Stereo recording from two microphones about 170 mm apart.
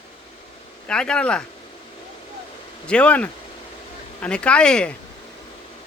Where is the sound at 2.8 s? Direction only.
5° left (ahead or behind).